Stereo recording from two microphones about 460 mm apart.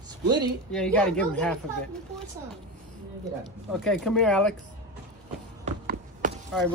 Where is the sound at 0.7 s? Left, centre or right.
Centre.